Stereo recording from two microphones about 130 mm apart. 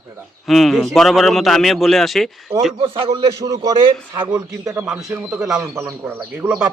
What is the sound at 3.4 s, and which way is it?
Speech, 25° right (ahead or behind).